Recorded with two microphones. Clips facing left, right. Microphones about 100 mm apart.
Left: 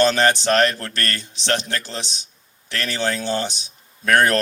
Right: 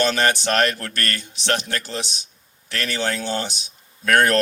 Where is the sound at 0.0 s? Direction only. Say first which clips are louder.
Left 3 dB; 20° left (ahead or behind).